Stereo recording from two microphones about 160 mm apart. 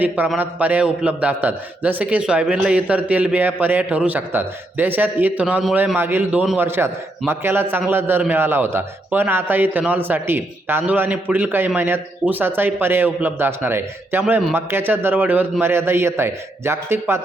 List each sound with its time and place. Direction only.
0.0 s a man's voice: 10° right (ahead or behind)